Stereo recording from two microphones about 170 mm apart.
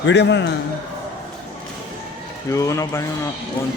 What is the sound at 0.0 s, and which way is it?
Speech, 90° left.